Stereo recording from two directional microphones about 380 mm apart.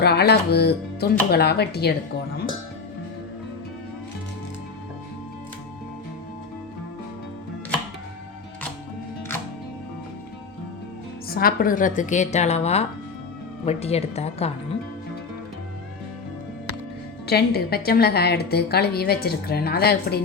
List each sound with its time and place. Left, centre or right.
0.0 s a woman's voice: left
11.3 s a woman's voice: left
17.2 s a woman's voice: left